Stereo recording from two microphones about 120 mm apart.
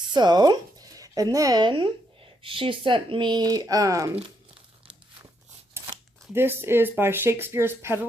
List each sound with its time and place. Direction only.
0.1 s speech: 35° right (ahead or behind)
6.3 s speech: 20° right (ahead or behind)